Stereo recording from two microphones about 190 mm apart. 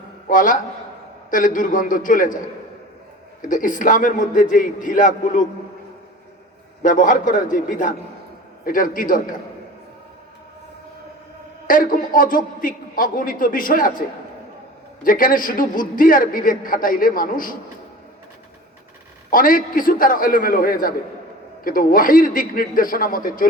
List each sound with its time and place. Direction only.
0.3 s a man's voice: 45° left (ahead or behind)
3.4 s a man's voice: 45° left (ahead or behind)
6.8 s a man's voice: 45° left (ahead or behind)
11.7 s a man's voice: 45° left (ahead or behind)
15.0 s a man's voice: 45° left (ahead or behind)
19.3 s a man's voice: 45° left (ahead or behind)